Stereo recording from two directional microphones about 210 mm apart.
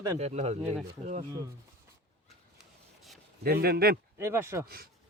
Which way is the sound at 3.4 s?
45° right (ahead or behind).